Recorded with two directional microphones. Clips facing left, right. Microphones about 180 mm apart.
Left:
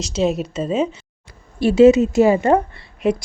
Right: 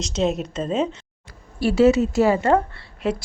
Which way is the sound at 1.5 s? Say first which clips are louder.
Left 5 dB; 20° left (ahead or behind).